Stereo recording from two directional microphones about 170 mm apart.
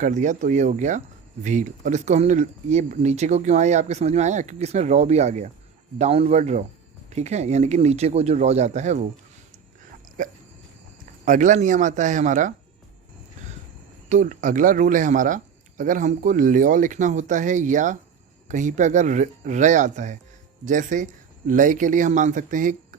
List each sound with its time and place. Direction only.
0.0 s speech: 45° right (ahead or behind)
11.3 s speech: 50° right (ahead or behind)
14.1 s speech: 50° right (ahead or behind)